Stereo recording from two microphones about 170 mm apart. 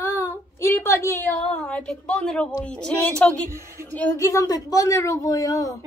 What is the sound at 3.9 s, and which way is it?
A woman's voice, 10° left (ahead or behind).